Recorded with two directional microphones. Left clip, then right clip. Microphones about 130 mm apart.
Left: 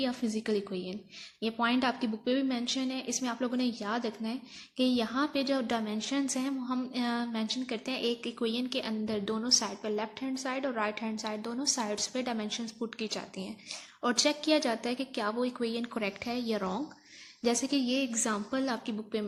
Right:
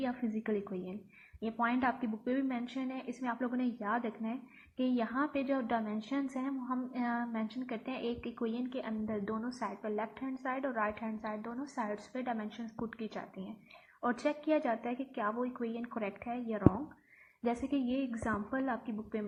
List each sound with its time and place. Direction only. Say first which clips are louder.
0.0 s a woman's voice: left 4 dB; 15° left (ahead or behind)
14.3 s a woman's voice: left 2 dB; 20° left (ahead or behind)
17.4 s a woman's voice: left 5 dB; 15° left (ahead or behind)